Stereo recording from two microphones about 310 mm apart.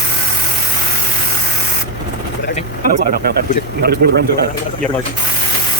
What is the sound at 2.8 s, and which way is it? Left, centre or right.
Speech, right.